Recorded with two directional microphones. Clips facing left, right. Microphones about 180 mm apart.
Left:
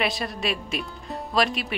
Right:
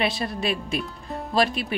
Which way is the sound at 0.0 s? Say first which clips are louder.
Right 1 dB; 30° right (ahead or behind).